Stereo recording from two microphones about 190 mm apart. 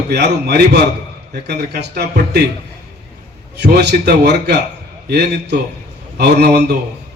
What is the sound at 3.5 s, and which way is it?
A man's voice, 60° right (ahead or behind).